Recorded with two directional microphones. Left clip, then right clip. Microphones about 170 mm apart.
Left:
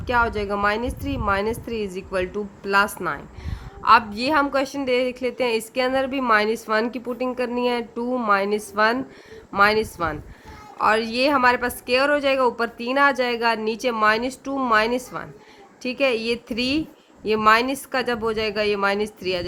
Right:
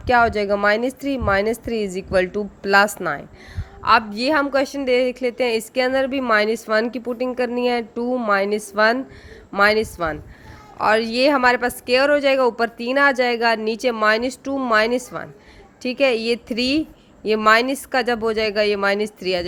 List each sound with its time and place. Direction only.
0.0 s a woman's voice: 25° right (ahead or behind)